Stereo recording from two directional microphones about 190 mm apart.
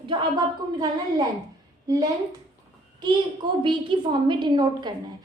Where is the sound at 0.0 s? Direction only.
25° right (ahead or behind).